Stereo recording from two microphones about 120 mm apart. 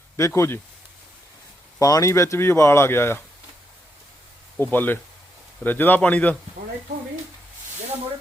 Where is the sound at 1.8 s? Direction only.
30° left (ahead or behind).